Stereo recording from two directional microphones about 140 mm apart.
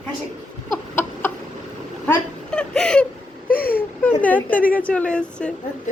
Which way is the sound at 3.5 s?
90° left.